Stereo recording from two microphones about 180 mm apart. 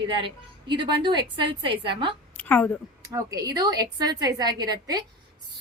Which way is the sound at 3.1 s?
20° right (ahead or behind).